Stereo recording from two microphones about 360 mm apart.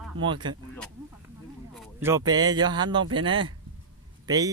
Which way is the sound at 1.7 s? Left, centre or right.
Centre.